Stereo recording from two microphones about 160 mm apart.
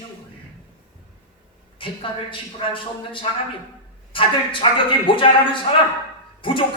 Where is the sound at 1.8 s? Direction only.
30° left (ahead or behind).